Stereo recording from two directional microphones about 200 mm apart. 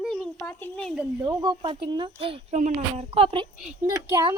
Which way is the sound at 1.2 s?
20° right (ahead or behind).